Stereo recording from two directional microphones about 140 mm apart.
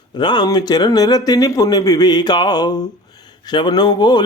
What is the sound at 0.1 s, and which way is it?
A man's voice, 30° left (ahead or behind).